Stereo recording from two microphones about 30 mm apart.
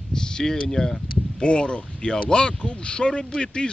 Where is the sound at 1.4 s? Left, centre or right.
Left.